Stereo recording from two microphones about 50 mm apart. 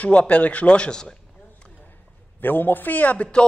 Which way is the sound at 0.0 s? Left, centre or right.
Left.